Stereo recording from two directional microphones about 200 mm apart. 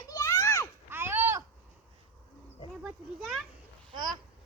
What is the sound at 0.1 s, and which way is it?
Children playing, 20° left (ahead or behind).